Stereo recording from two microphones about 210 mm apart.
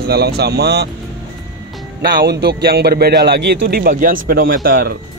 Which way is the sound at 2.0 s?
50° right (ahead or behind).